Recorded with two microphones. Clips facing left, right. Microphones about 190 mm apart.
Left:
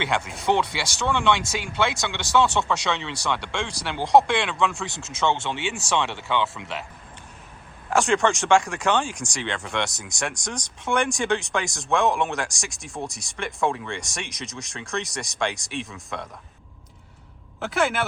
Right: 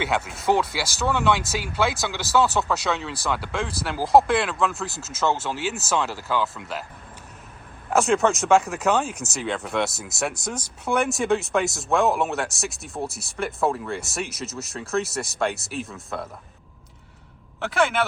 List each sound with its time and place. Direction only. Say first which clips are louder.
0.0 s speech: right 1 dB; 5° right (ahead or behind)
7.9 s speech: right 1 dB; centre (ahead or behind)